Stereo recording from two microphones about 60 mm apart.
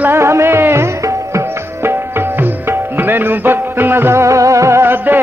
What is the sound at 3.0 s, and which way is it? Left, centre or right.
Music, right.